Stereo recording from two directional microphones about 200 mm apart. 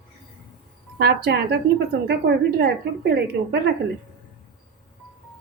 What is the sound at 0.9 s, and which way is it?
A woman's voice, 55° right (ahead or behind).